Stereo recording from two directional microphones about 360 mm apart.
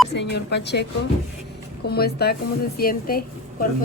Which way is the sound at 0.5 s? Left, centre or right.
Left.